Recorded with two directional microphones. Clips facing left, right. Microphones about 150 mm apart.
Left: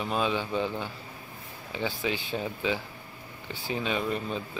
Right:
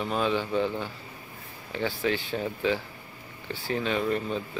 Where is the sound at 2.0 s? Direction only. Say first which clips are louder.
Right 3 dB; 20° left (ahead or behind).